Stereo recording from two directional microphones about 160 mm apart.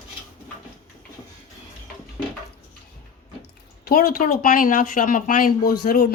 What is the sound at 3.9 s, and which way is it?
Speech, 65° left (ahead or behind).